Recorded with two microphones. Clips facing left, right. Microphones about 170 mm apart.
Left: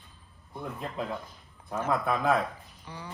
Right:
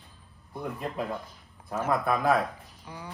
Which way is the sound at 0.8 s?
Centre (ahead or behind).